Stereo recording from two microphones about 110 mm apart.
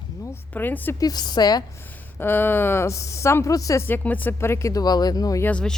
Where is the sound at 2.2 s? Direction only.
20° left (ahead or behind).